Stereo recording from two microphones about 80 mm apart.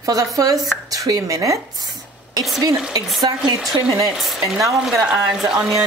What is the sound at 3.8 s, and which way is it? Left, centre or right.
Speech, right.